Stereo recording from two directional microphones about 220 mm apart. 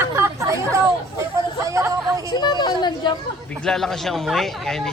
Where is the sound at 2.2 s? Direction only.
20° left (ahead or behind).